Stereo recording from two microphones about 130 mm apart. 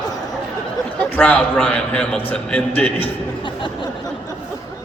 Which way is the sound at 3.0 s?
40° left (ahead or behind).